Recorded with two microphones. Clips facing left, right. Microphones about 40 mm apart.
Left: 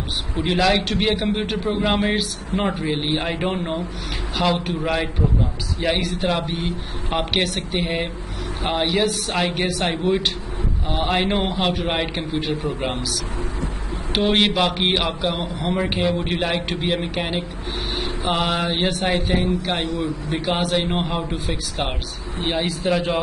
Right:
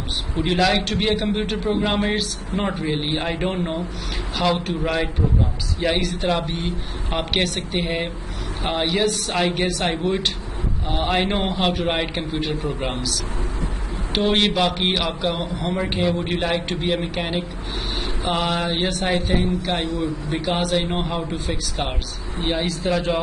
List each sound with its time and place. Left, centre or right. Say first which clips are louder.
0.4 s a man's voice: even; centre
14.1 s a man's voice: left 1 dB; centre
19.8 s a man's voice: even; left
20.4 s a man's voice: left 1 dB; centre